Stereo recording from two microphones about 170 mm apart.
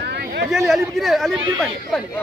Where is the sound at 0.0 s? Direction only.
75° right (ahead or behind).